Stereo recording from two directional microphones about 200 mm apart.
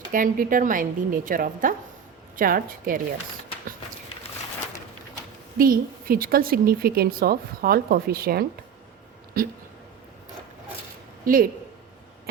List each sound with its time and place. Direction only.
0.1 s a woman's voice: 45° right (ahead or behind)
5.5 s a woman's voice: 45° right (ahead or behind)
11.3 s a woman's voice: 45° right (ahead or behind)